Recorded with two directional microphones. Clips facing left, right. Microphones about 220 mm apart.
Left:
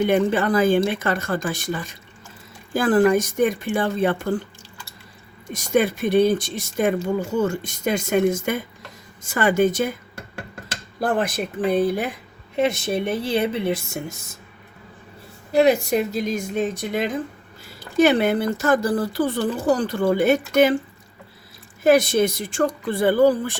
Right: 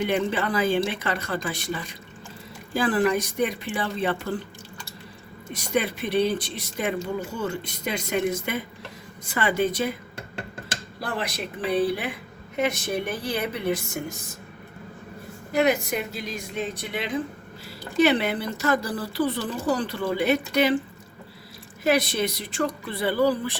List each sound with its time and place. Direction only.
0.1 s speech: 45° left (ahead or behind)
2.7 s speech: 45° left (ahead or behind)
5.5 s speech: 45° left (ahead or behind)
11.0 s speech: 50° left (ahead or behind)
12.5 s a woman's voice: 25° left (ahead or behind)
15.5 s speech: 30° left (ahead or behind); by 20.7 s 45° left (ahead or behind)
21.8 s speech: 50° left (ahead or behind)